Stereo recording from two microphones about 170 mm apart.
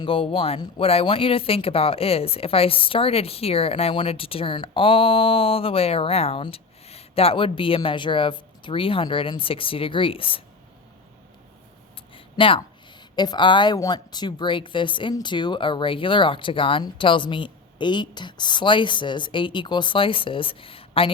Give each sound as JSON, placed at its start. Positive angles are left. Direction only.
{"t": 0.0, "sound": "speech", "side_deg": 30}
{"t": 12.1, "sound": "a sound", "side_deg": 30}
{"t": 13.1, "sound": "a woman's voice", "side_deg": 25}